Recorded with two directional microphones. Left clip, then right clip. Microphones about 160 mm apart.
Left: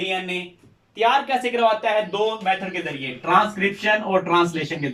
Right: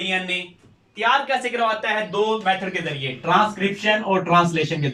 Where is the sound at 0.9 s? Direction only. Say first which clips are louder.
Even; 20° left (ahead or behind).